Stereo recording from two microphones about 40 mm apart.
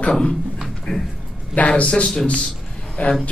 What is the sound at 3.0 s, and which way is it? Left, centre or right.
Speech, left.